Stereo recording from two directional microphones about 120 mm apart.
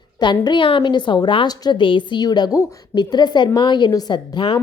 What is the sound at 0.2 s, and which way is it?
A woman's voice, 40° left (ahead or behind).